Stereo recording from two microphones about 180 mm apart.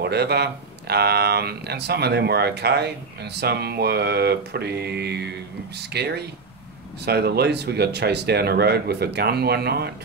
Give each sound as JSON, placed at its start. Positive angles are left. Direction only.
{"t": 0.0, "sound": "speech", "side_deg": -65}